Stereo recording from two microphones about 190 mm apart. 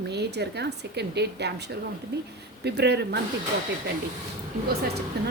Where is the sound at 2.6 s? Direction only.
60° right (ahead or behind).